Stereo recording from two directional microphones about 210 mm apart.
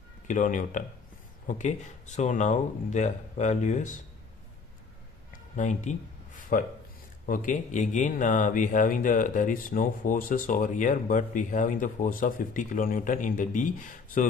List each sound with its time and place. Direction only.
0.3 s speech: 35° left (ahead or behind)
5.6 s speech: 35° left (ahead or behind)